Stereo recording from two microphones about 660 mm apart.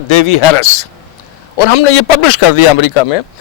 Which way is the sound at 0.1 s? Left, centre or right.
Left.